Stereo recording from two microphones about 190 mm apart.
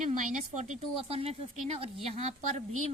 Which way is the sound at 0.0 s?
40° right (ahead or behind).